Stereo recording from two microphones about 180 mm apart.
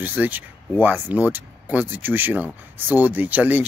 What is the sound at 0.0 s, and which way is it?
Speech, 10° right (ahead or behind).